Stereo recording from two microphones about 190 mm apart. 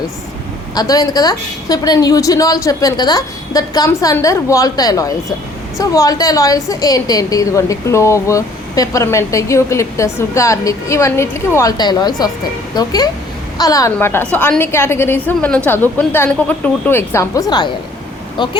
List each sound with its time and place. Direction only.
0.7 s a woman's voice: 20° left (ahead or behind)